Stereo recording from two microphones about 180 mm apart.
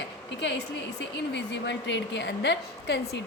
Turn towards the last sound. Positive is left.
turn(degrees=70)  # may be behind; listen again after turning